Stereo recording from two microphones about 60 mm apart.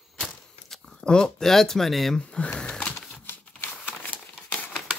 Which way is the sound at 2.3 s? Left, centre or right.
Left.